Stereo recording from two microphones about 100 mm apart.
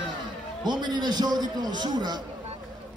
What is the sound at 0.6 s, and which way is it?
A man's voice, 45° right (ahead or behind).